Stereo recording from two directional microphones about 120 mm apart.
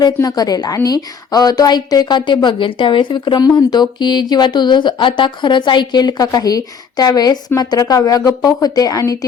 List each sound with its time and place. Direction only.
0.0 s a woman's voice: 35° left (ahead or behind)